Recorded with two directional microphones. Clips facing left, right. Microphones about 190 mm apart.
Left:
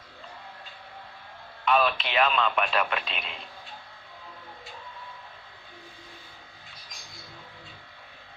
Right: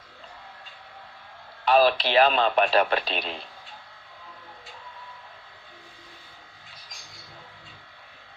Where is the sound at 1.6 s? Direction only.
35° right (ahead or behind).